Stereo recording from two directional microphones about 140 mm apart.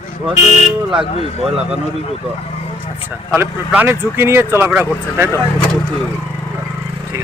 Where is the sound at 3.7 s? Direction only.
15° right (ahead or behind).